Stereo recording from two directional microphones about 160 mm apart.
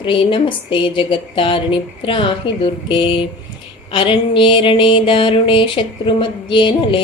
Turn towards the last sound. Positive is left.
turn(degrees=30)  # may be behind; listen again after turning